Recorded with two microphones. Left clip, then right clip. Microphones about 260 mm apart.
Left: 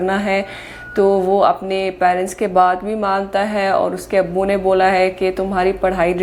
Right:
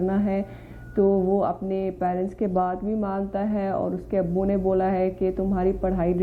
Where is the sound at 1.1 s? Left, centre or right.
Left.